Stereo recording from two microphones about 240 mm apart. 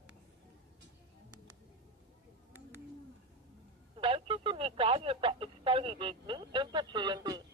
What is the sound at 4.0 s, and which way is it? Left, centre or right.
Speech, right.